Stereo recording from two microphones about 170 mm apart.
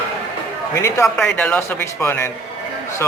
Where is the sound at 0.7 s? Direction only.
15° left (ahead or behind).